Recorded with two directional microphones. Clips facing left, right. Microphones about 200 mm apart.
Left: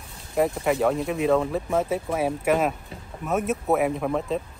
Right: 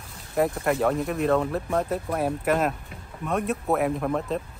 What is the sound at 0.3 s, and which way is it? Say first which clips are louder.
Speech: left 1 dB; centre (ahead or behind).